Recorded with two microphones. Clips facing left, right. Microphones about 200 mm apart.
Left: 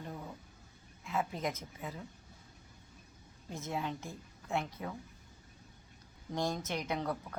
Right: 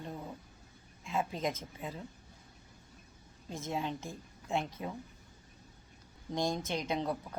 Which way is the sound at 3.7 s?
25° right (ahead or behind).